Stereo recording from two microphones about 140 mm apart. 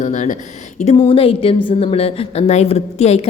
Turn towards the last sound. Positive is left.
turn(degrees=50)  # may be behind; listen again after turning